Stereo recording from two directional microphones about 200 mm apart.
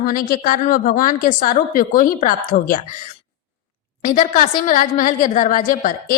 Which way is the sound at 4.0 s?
40° left (ahead or behind).